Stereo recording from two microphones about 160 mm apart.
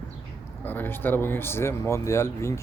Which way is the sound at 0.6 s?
10° left (ahead or behind).